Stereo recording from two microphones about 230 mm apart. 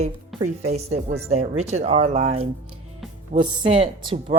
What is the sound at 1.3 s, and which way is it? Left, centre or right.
A woman's voice, right.